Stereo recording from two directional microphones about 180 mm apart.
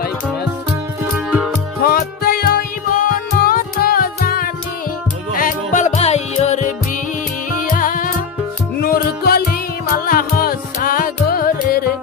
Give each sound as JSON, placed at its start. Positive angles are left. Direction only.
{"t": 1.9, "sound": "music", "side_deg": 55}
{"t": 5.4, "sound": "music", "side_deg": 45}
{"t": 7.6, "sound": "music", "side_deg": 50}